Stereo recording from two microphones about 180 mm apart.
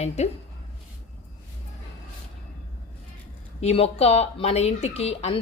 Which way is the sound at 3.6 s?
35° left (ahead or behind).